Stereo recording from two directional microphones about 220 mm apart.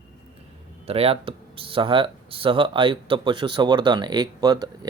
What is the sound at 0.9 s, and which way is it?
Speech, 25° right (ahead or behind).